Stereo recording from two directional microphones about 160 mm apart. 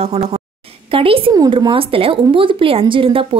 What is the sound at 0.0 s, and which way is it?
A woman's voice, 40° right (ahead or behind).